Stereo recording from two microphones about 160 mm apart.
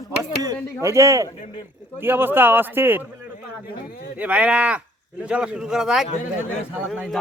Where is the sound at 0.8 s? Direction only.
20° right (ahead or behind).